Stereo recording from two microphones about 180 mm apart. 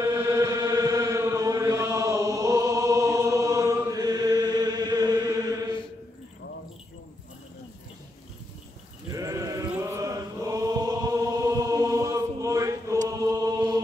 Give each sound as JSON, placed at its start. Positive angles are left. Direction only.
{"t": 0.0, "sound": "chant", "side_deg": -15}
{"t": 9.1, "sound": "chant", "side_deg": -20}
{"t": 13.1, "sound": "choir", "side_deg": -20}